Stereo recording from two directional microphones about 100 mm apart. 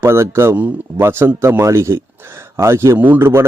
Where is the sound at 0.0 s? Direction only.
25° right (ahead or behind).